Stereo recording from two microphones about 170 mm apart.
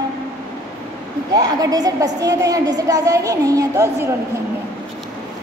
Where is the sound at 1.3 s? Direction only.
20° right (ahead or behind).